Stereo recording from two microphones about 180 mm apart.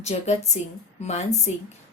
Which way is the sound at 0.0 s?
40° left (ahead or behind).